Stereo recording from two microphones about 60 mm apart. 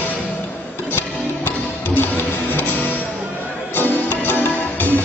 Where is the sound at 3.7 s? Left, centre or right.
Left.